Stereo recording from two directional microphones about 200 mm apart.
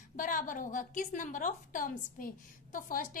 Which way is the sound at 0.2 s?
40° left (ahead or behind).